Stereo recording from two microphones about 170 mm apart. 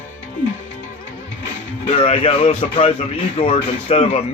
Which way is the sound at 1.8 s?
30° left (ahead or behind).